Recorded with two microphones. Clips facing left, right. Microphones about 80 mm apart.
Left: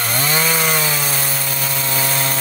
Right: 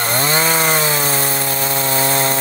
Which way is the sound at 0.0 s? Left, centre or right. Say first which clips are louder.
Right 3 dB; right.